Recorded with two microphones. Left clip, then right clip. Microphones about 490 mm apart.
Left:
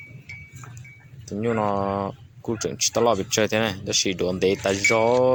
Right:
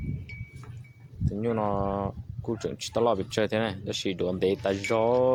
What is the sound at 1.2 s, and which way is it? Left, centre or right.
Speech, right.